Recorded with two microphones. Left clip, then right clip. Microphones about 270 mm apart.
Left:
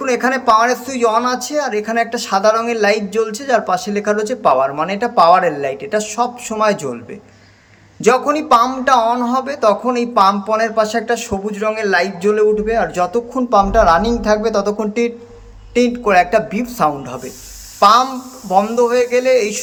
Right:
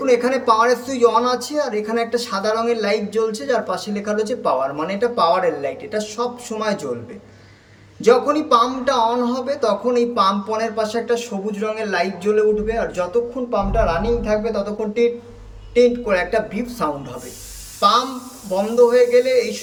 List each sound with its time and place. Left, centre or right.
0.0 s a man's voice: centre
8.0 s a man's voice: centre